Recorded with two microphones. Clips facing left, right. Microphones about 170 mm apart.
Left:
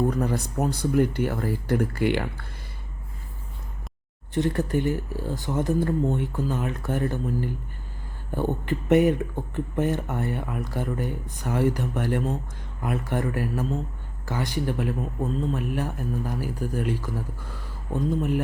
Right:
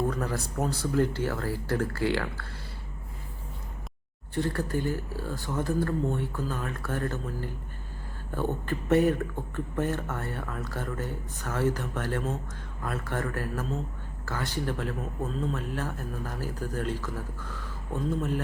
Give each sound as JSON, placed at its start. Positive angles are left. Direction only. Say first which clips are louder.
{"t": 0.1, "sound": "speech", "louder": "left 5 dB", "side_deg": 20}
{"t": 4.4, "sound": "speech", "louder": "left 5 dB", "side_deg": 20}